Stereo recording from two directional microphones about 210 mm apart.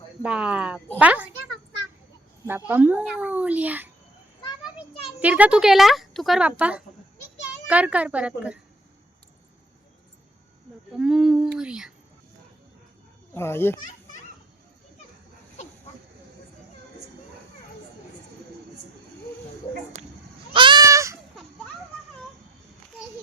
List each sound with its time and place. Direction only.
0.2 s a child's voice: 5° right (ahead or behind)
2.6 s a child's voice: 10° right (ahead or behind)
5.2 s a child's voice: 5° right (ahead or behind)
10.9 s speech: centre (ahead or behind)
13.3 s a child's voice: 10° left (ahead or behind)
20.5 s goat: 20° right (ahead or behind)